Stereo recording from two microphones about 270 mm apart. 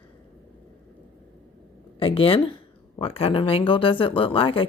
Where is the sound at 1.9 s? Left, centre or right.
Centre.